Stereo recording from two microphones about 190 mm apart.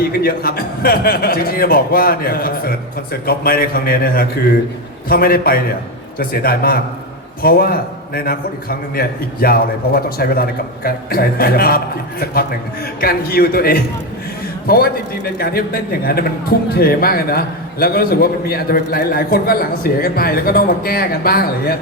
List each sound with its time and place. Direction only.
0.2 s a man's voice: 50° left (ahead or behind)